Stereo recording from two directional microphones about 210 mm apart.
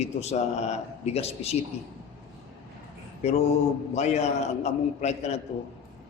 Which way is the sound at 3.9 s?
30° left (ahead or behind).